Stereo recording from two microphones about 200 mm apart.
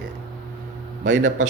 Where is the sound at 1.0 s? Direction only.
70° right (ahead or behind).